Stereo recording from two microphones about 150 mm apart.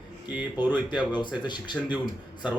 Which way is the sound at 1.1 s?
30° left (ahead or behind).